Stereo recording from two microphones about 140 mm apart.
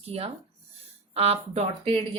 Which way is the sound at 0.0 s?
45° right (ahead or behind).